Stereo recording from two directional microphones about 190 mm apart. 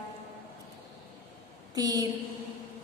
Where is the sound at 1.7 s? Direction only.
20° right (ahead or behind).